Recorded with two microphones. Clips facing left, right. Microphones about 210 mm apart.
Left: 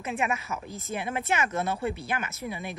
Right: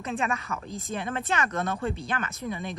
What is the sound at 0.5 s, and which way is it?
A woman's voice, 20° left (ahead or behind).